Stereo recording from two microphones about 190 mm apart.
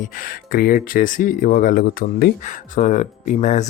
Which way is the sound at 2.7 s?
40° left (ahead or behind).